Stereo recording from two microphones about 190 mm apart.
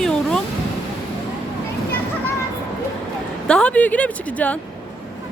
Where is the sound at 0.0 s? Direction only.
5° left (ahead or behind).